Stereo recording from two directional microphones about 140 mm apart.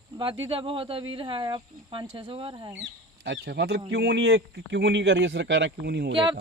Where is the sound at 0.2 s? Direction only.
35° right (ahead or behind).